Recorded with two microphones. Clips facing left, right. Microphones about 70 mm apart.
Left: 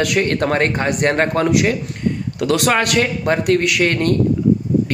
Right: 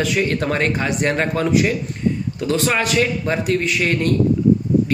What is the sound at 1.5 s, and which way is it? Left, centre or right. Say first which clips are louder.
Speech: left 1 dB; left.